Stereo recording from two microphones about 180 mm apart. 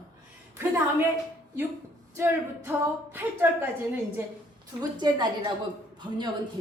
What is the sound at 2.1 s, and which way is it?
A woman's voice, 10° right (ahead or behind).